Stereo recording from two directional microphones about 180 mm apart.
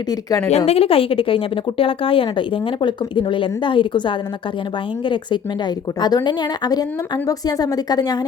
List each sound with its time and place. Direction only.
0.1 s speech: 20° left (ahead or behind)
0.5 s a woman's voice: 35° left (ahead or behind)